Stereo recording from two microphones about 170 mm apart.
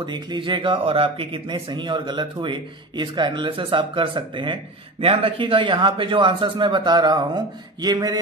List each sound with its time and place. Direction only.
0.0 s a man's voice: 25° right (ahead or behind)